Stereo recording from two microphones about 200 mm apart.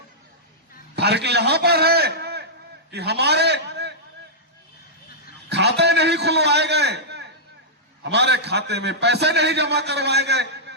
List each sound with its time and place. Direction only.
0.9 s a sound: 55° right (ahead or behind)
2.9 s a man's voice: 55° right (ahead or behind)
5.5 s a man's voice: 55° right (ahead or behind)